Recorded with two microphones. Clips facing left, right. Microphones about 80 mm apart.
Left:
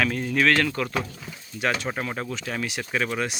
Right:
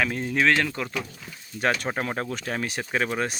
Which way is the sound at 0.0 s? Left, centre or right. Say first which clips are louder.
Left 1 dB; right.